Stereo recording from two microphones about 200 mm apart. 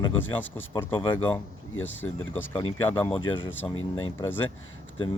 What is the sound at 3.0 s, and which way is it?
Speech, 25° left (ahead or behind).